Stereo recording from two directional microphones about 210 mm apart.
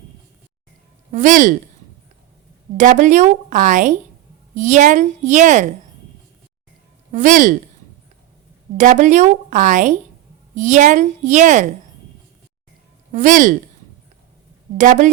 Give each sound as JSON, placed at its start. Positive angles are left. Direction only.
{"t": 1.1, "sound": "a woman's voice", "side_deg": -40}
{"t": 2.7, "sound": "a woman's voice", "side_deg": -35}
{"t": 7.1, "sound": "a woman's voice", "side_deg": -35}
{"t": 8.8, "sound": "a woman's voice", "side_deg": -35}
{"t": 13.1, "sound": "a woman's voice", "side_deg": -35}
{"t": 14.8, "sound": "a woman's voice", "side_deg": -35}